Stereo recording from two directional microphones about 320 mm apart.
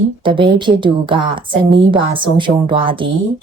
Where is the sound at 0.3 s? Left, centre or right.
Centre.